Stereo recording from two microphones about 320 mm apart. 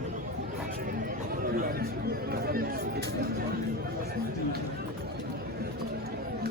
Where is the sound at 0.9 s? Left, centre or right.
Right.